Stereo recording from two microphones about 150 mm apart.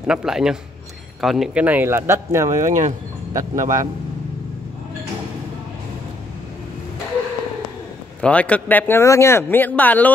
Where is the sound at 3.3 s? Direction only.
20° right (ahead or behind).